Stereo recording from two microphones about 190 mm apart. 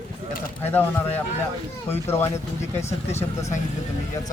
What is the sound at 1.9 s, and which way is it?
Speech, 10° left (ahead or behind).